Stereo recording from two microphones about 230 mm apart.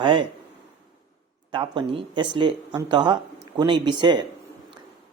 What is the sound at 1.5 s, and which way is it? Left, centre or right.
Speech, centre.